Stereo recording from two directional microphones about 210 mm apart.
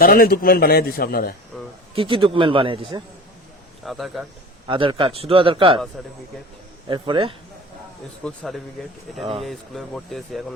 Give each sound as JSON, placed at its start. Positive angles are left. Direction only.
{"t": 0.0, "sound": "a man's voice", "side_deg": 45}
{"t": 2.0, "sound": "a man's voice", "side_deg": -25}
{"t": 3.8, "sound": "speech", "side_deg": 0}
{"t": 4.6, "sound": "a man's voice", "side_deg": -20}
{"t": 6.8, "sound": "a man's voice", "side_deg": -25}
{"t": 8.2, "sound": "speech", "side_deg": 0}